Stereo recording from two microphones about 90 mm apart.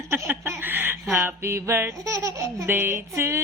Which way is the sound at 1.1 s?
25° right (ahead or behind).